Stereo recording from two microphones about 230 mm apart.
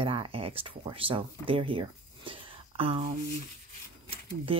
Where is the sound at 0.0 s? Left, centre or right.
Right.